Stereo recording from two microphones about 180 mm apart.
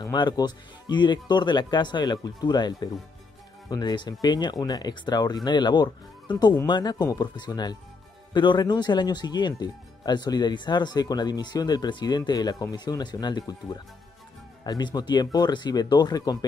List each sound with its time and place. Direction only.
0.0 s speech: 25° left (ahead or behind)